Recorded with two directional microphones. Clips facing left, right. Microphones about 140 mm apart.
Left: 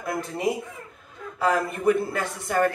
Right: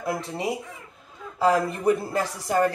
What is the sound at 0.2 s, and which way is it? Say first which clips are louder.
A woman's voice: left 2 dB; 30° right (ahead or behind).